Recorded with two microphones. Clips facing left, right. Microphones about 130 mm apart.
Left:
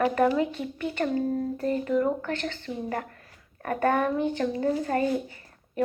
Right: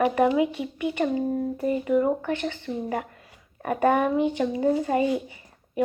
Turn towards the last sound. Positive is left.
turn(degrees=-10)  # may be behind; listen again after turning